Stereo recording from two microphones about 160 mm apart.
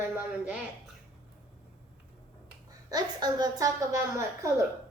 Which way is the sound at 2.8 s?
25° right (ahead or behind).